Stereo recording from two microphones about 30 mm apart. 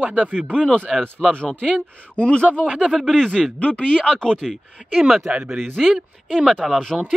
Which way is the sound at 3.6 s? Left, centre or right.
Left.